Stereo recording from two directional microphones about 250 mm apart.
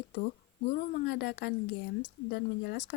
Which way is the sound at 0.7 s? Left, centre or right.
Left.